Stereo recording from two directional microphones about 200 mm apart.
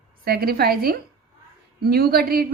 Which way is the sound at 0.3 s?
50° right (ahead or behind).